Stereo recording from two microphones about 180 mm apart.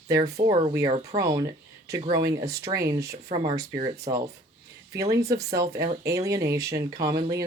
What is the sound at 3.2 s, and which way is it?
Speech, 35° right (ahead or behind).